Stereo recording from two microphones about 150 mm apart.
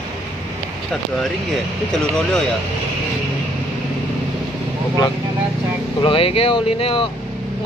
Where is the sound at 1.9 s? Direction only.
5° left (ahead or behind).